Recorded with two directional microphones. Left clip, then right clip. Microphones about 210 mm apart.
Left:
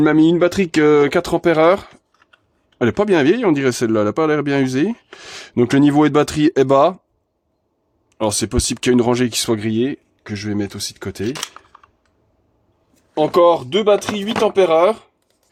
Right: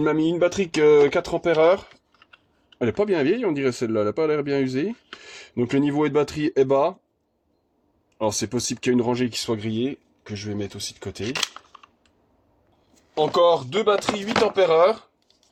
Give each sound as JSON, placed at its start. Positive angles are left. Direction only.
{"t": 0.0, "sound": "speech", "side_deg": 45}
{"t": 2.7, "sound": "speech", "side_deg": 35}
{"t": 8.2, "sound": "speech", "side_deg": 30}
{"t": 11.2, "sound": "a sound", "side_deg": 10}
{"t": 13.1, "sound": "speech", "side_deg": 50}